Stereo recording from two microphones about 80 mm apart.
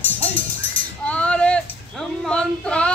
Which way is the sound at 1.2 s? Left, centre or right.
Centre.